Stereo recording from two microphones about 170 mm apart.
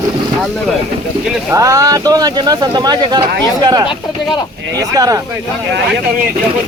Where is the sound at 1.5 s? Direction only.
20° right (ahead or behind).